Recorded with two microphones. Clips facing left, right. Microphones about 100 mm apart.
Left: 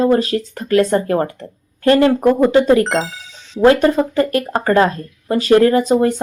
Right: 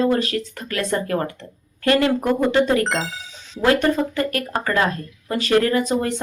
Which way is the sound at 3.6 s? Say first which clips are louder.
Left 6 dB; 30° left (ahead or behind).